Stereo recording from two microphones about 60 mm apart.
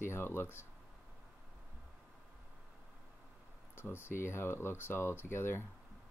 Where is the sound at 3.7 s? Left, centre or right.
Left.